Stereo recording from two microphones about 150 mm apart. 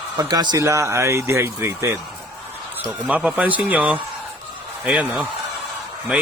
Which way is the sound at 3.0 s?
5° right (ahead or behind).